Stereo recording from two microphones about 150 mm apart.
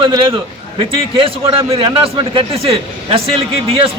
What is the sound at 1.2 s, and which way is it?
A man's voice, 35° right (ahead or behind).